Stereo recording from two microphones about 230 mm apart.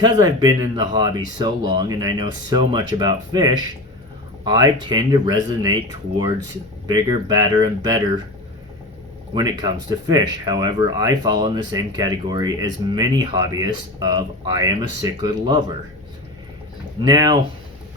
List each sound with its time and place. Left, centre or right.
0.0 s speech: centre
9.3 s speech: centre
17.0 s speech: centre